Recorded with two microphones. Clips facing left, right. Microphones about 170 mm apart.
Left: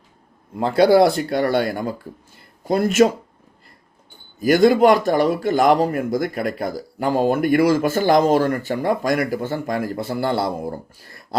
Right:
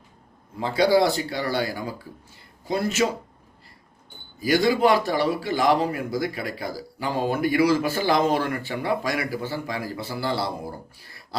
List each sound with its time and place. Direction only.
0.6 s a man's voice: 60° left (ahead or behind)
4.4 s a man's voice: 50° left (ahead or behind)
10.9 s a sound: 45° left (ahead or behind)